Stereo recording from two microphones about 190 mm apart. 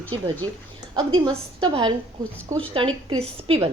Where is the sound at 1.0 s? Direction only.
25° right (ahead or behind).